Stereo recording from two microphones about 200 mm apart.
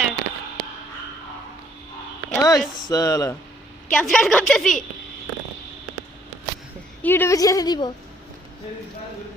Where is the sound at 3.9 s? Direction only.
Centre (ahead or behind).